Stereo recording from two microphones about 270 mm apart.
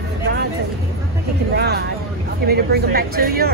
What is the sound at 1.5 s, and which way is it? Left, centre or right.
Speech, right.